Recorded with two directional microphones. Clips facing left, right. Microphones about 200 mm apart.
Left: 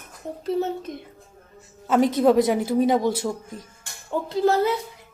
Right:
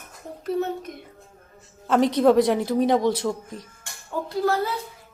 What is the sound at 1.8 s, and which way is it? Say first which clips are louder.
A woman's voice: even; 5° left (ahead or behind).